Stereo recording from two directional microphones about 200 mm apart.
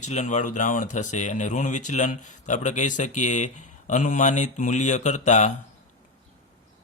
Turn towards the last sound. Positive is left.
turn(degrees=35)  # may be behind; listen again after turning